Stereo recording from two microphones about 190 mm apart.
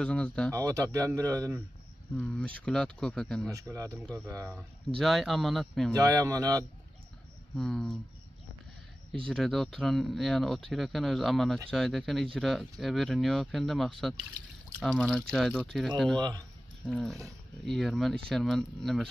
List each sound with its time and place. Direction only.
0.0 s speech: 5° left (ahead or behind)
0.5 s speech: 20° right (ahead or behind)
2.1 s speech: 5° left (ahead or behind)
3.5 s a man's voice: 15° right (ahead or behind)
3.9 s speech: 5° left (ahead or behind)
4.3 s a man's voice: 15° right (ahead or behind)
4.6 s speech: centre (ahead or behind)
5.9 s speech: 20° right (ahead or behind)
7.5 s speech: centre (ahead or behind)
9.3 s speech: centre (ahead or behind)
16.2 s speech: 25° right (ahead or behind)
16.8 s speech: 5° left (ahead or behind)